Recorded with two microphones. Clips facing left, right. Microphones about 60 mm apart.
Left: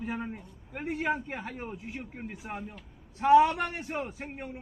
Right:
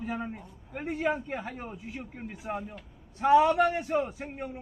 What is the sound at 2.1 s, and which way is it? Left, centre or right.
Speech, centre.